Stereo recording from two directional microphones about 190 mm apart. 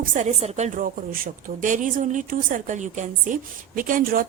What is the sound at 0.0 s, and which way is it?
A woman's voice, 40° right (ahead or behind).